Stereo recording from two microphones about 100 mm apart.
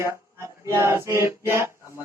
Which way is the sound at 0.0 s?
30° right (ahead or behind).